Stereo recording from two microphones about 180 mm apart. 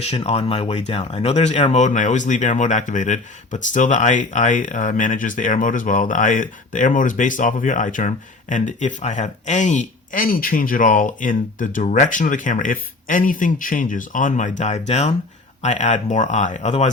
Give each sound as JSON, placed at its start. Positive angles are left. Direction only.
{"t": 0.0, "sound": "speech", "side_deg": 35}